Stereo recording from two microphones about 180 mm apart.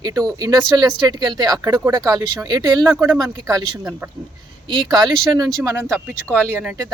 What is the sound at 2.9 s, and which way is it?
Speech, 10° right (ahead or behind).